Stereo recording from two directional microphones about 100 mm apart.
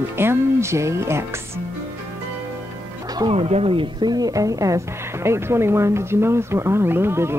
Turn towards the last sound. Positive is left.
turn(degrees=-25)  # may be behind; listen again after turning